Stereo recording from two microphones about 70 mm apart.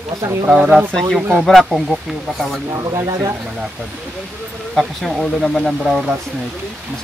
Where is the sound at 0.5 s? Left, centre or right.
Centre.